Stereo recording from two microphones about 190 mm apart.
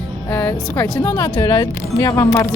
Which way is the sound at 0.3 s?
10° left (ahead or behind).